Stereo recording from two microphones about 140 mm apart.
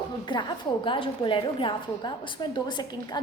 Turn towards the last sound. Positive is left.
turn(degrees=30)  # may be behind; listen again after turning